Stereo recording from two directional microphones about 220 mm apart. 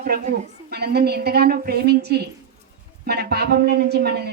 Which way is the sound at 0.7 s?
45° right (ahead or behind).